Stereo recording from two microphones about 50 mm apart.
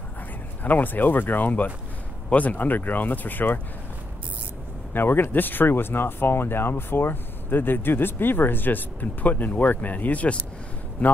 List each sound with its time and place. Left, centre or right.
0.7 s speech: left
4.9 s speech: left